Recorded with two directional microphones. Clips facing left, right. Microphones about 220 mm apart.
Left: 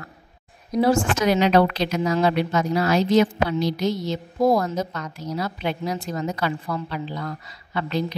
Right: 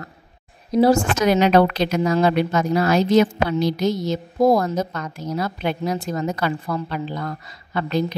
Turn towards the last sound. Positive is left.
turn(degrees=-45)  # may be behind; listen again after turning